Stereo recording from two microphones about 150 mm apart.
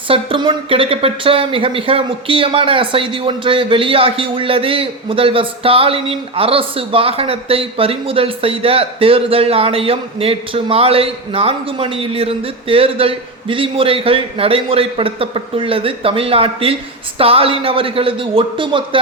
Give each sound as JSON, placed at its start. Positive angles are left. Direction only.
{"t": 0.1, "sound": "speech", "side_deg": -35}